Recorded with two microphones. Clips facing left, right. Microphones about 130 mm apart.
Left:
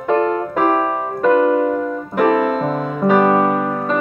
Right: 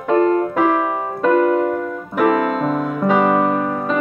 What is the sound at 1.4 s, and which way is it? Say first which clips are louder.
Keyboard: left 1 dB; 20° left (ahead or behind).